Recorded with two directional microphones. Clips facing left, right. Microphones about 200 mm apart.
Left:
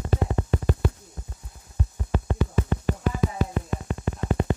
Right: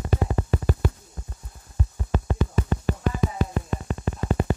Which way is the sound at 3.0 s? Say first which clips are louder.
Even; 5° left (ahead or behind).